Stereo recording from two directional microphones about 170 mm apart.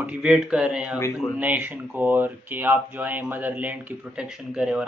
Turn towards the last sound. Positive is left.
turn(degrees=-5)  # may be behind; listen again after turning